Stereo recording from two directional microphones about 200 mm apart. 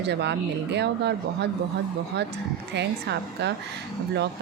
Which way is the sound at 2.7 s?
60° right (ahead or behind).